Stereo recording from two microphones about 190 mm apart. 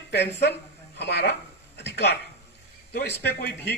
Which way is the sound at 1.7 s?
60° left (ahead or behind).